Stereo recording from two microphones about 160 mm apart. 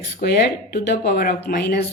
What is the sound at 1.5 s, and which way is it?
Speech, 85° left.